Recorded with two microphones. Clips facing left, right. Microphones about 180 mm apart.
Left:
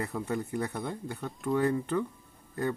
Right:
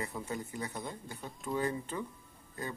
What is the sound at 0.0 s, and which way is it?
Speech, 65° left (ahead or behind).